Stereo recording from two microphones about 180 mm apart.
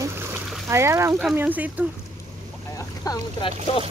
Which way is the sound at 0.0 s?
10° right (ahead or behind).